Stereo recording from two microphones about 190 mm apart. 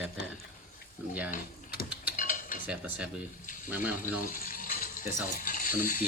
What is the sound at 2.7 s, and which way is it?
Speech, 5° right (ahead or behind).